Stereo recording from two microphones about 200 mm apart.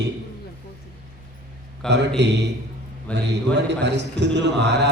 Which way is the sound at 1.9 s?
60° right (ahead or behind).